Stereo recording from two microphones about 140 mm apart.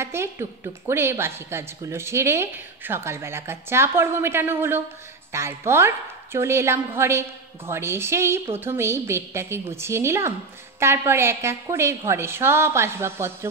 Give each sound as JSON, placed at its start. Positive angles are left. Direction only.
{"t": 0.0, "sound": "a woman's voice", "side_deg": -20}